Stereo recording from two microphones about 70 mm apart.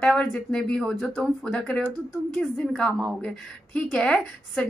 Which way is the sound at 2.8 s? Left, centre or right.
Centre.